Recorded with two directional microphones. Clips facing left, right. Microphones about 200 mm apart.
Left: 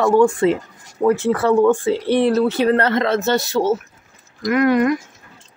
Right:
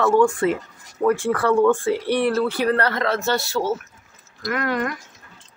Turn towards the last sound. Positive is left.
turn(degrees=15)  # may be behind; listen again after turning